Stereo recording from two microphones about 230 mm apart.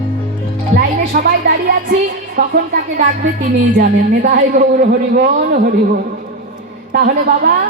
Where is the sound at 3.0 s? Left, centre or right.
Right.